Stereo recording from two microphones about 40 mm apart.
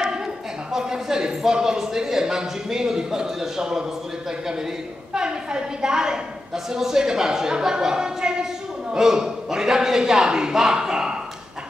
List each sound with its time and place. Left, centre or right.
0.7 s a woman's voice: centre
5.1 s a woman's voice: centre